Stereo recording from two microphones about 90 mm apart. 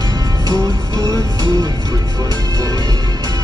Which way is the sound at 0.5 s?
35° right (ahead or behind).